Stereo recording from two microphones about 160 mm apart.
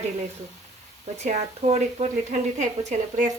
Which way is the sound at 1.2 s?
40° right (ahead or behind).